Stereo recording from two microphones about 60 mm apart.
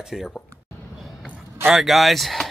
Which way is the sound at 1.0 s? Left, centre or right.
Centre.